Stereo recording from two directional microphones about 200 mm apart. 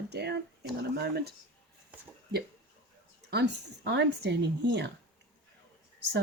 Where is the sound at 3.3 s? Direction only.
60° right (ahead or behind).